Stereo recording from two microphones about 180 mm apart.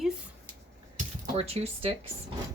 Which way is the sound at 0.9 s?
35° right (ahead or behind).